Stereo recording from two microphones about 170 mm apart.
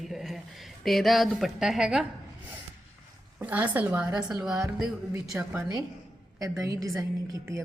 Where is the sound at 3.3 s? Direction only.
10° right (ahead or behind).